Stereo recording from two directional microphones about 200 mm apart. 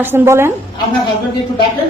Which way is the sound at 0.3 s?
15° right (ahead or behind).